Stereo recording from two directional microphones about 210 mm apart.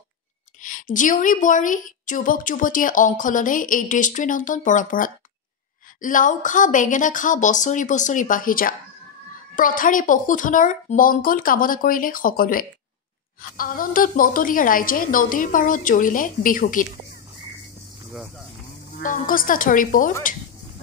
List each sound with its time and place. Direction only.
0.6 s a woman's voice: 40° left (ahead or behind)
19.0 s a woman's voice: 40° left (ahead or behind)